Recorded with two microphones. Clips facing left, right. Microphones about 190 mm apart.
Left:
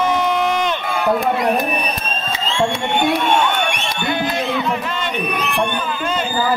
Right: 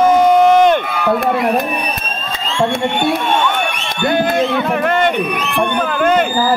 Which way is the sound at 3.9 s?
50° right (ahead or behind).